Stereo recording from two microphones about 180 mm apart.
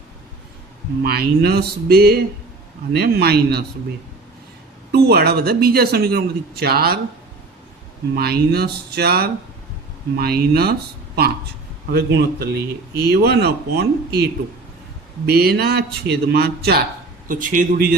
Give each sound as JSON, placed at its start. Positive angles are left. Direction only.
{"t": 1.0, "sound": "a man's voice", "side_deg": -60}
{"t": 4.9, "sound": "a man's voice", "side_deg": -60}
{"t": 8.1, "sound": "a man's voice", "side_deg": -60}
{"t": 15.3, "sound": "a man's voice", "side_deg": -60}
{"t": 17.2, "sound": "speech", "side_deg": -45}